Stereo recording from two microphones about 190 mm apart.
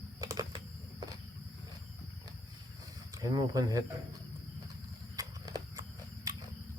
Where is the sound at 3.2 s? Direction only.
15° right (ahead or behind).